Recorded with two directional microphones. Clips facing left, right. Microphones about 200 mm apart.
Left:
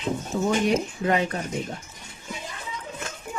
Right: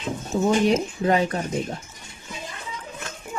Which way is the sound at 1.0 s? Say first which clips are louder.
Right 3 dB; 30° right (ahead or behind).